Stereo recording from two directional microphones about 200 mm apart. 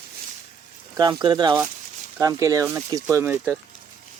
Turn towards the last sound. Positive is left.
turn(degrees=-10)  # may be behind; listen again after turning